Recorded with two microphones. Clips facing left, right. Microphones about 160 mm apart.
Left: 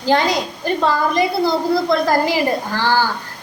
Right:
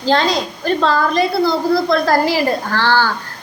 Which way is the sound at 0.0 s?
15° left (ahead or behind).